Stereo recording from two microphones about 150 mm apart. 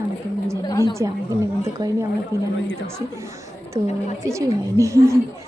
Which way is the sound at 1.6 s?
20° right (ahead or behind).